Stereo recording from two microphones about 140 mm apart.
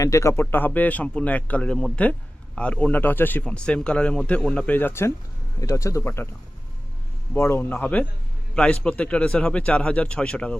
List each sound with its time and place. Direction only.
0.0 s a man's voice: 20° left (ahead or behind)
7.3 s a man's voice: 15° left (ahead or behind)